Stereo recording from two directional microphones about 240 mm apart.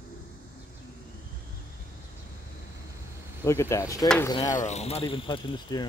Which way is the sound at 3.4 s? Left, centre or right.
Centre.